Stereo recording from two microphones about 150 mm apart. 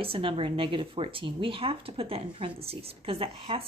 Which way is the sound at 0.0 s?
35° right (ahead or behind).